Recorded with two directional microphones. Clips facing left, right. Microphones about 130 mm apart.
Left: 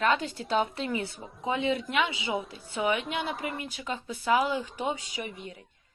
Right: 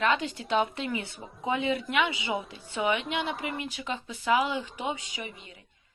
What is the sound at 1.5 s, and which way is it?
Speech, 25° left (ahead or behind).